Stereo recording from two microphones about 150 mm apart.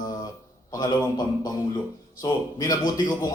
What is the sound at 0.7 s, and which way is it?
A man's voice, 25° left (ahead or behind).